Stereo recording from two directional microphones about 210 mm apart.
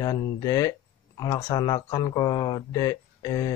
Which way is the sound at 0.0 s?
15° left (ahead or behind).